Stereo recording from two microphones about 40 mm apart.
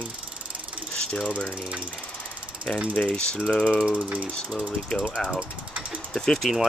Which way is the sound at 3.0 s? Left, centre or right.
Left.